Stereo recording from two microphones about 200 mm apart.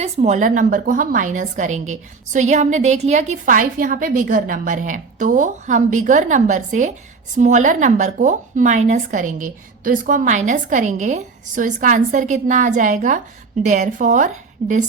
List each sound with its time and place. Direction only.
0.0 s speech: 35° right (ahead or behind)